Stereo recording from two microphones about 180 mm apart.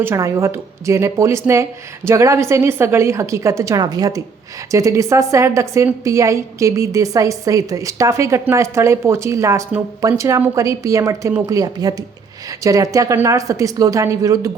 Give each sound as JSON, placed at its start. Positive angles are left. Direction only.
{"t": 0.0, "sound": "a woman's voice", "side_deg": -15}